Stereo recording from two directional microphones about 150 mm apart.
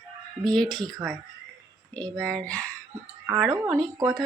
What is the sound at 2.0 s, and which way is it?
Speech, 10° left (ahead or behind).